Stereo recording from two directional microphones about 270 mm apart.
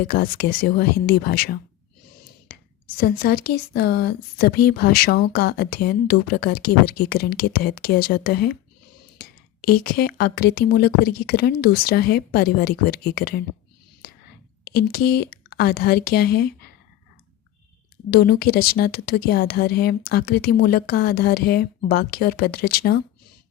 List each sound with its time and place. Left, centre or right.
0.1 s speech: left
3.0 s speech: left
14.9 s speech: left
18.1 s speech: left